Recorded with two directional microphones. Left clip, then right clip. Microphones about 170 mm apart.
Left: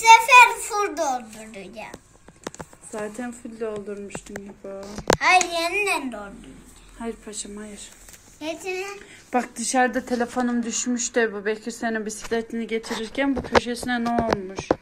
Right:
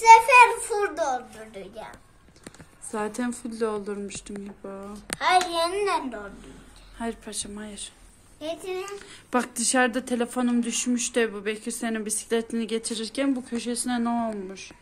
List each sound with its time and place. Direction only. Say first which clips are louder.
0.0 s a sound: left 2 dB; 20° right (ahead or behind)
2.9 s a woman's voice: right 2 dB; 20° right (ahead or behind)
5.2 s a woman's voice: left 1 dB; 5° right (ahead or behind)
10.7 s speech: left 1 dB; 35° right (ahead or behind)
11.1 s a woman's voice: left 4 dB; 10° right (ahead or behind)